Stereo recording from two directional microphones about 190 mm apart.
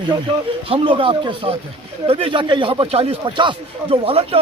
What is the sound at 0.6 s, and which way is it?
Speech, 30° right (ahead or behind).